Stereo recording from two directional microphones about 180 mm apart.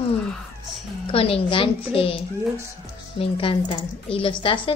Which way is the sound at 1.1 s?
30° left (ahead or behind).